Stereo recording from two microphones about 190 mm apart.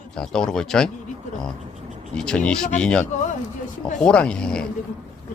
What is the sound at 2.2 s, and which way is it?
Speech, 5° left (ahead or behind).